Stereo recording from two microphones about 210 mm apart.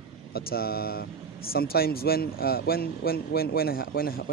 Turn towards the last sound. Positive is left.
turn(degrees=45)  # may be behind; listen again after turning